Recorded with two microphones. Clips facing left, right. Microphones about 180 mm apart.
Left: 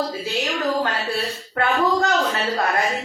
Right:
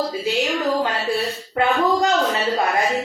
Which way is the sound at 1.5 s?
20° right (ahead or behind).